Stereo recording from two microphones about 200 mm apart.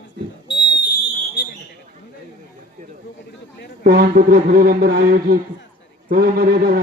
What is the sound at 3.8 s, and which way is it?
A man's voice, 50° right (ahead or behind).